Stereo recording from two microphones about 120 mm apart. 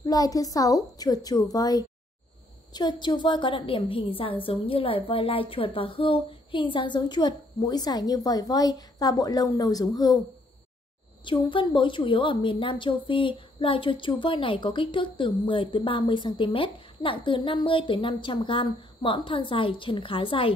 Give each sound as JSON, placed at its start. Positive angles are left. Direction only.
{"t": 0.0, "sound": "a woman's voice", "side_deg": 30}
{"t": 11.2, "sound": "a woman's voice", "side_deg": 45}